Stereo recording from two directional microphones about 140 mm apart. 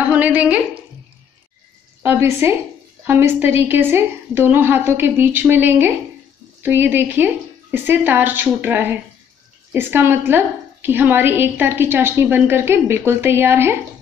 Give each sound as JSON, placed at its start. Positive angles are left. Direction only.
{"t": 0.1, "sound": "a woman's voice", "side_deg": -10}
{"t": 2.0, "sound": "a woman's voice", "side_deg": -20}